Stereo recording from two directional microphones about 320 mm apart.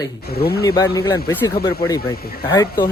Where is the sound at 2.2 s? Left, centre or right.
Left.